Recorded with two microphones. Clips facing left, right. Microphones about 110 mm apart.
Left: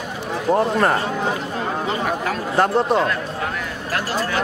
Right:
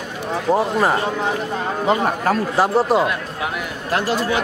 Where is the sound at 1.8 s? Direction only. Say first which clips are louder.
Right 8 dB; 40° right (ahead or behind).